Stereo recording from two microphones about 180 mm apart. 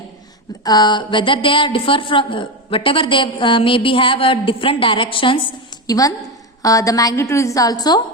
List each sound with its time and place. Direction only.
0.6 s a woman's voice: 25° left (ahead or behind)